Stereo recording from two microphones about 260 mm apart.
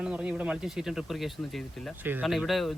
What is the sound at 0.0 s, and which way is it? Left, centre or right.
Speech, centre.